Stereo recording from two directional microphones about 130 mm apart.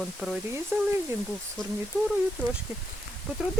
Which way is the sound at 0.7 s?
15° right (ahead or behind).